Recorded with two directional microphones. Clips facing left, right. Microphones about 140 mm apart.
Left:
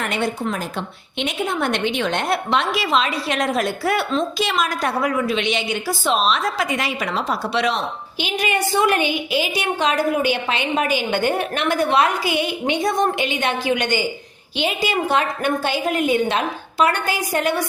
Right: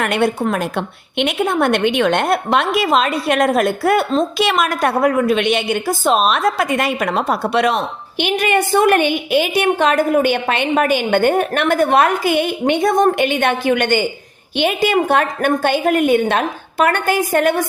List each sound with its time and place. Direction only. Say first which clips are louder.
0.0 s a woman's voice: right 6 dB; 60° right (ahead or behind); by 4.3 s 45° right (ahead or behind)
4.4 s a woman's voice: right 5 dB; 60° right (ahead or behind)